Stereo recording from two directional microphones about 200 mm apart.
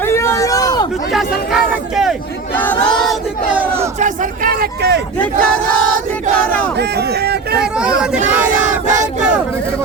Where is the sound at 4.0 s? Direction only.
45° right (ahead or behind).